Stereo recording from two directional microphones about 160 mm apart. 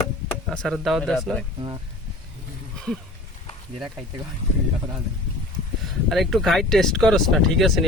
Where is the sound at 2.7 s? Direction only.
5° left (ahead or behind).